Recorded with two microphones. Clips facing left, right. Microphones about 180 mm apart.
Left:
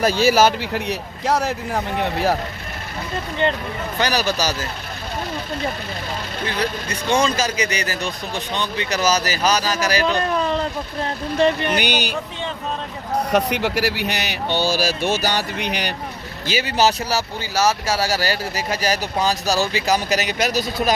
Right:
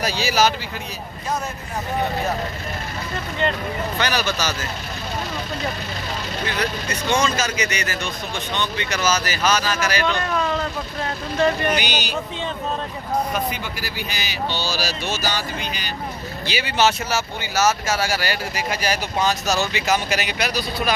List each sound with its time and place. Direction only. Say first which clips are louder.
0.0 s speech: left 5 dB; 50° left (ahead or behind); by 2.3 s 75° left (ahead or behind)
4.0 s speech: left 4 dB; 35° left (ahead or behind)
6.4 s speech: left 2 dB; 30° left (ahead or behind)
11.7 s speech: left 2 dB; 55° left (ahead or behind)
13.3 s speech: left 7 dB; 75° left (ahead or behind)
16.5 s speech: left 2 dB; 40° left (ahead or behind)